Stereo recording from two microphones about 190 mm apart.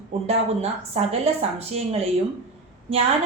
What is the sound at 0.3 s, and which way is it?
Speech, 35° right (ahead or behind).